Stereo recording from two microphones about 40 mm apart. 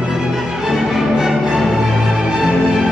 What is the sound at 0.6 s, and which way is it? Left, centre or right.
Music, centre.